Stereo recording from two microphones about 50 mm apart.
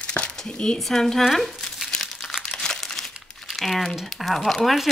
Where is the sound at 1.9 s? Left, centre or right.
Centre.